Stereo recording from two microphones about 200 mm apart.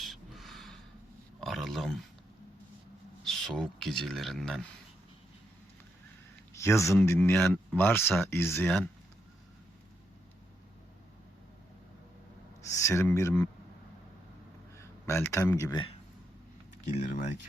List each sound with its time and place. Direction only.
0.0 s crow: centre (ahead or behind)
1.4 s a sound: centre (ahead or behind)
3.2 s speech: centre (ahead or behind)
6.5 s a sound: 15° left (ahead or behind)
6.9 s speech: 15° left (ahead or behind)
12.6 s speech: 15° left (ahead or behind)
14.8 s speech: 15° left (ahead or behind)
16.9 s speech: 35° left (ahead or behind)